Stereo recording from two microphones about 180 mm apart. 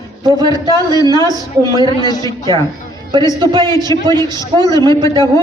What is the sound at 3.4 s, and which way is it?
Speech, 25° right (ahead or behind).